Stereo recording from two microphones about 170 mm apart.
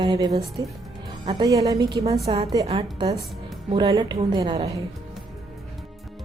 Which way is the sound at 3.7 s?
25° right (ahead or behind).